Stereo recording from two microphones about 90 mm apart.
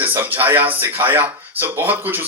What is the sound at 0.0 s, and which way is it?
A man's voice, 20° right (ahead or behind).